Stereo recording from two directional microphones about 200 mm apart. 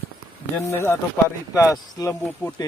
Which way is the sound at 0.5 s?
10° left (ahead or behind).